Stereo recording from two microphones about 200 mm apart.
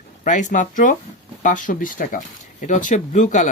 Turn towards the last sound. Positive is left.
turn(degrees=35)  # may be behind; listen again after turning